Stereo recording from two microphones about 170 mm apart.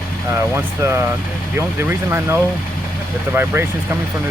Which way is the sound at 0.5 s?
15° right (ahead or behind).